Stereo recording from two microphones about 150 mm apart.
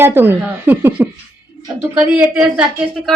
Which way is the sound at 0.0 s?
15° right (ahead or behind).